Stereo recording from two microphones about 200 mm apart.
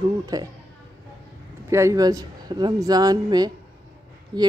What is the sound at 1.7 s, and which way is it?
A woman's voice, 15° right (ahead or behind).